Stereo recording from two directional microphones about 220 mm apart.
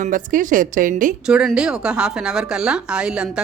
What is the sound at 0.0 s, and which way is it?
Speech, 35° right (ahead or behind).